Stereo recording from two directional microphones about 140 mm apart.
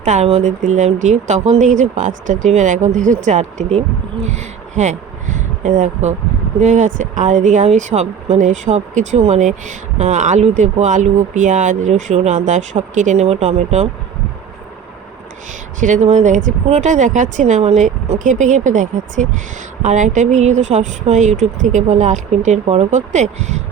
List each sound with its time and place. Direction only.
0.0 s speech: 55° right (ahead or behind)
15.8 s speech: 60° right (ahead or behind)